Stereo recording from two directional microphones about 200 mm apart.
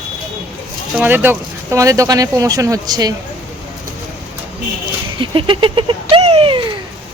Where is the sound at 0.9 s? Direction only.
10° right (ahead or behind).